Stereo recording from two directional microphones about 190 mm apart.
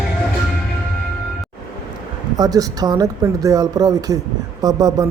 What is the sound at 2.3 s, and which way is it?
Speech, 20° right (ahead or behind).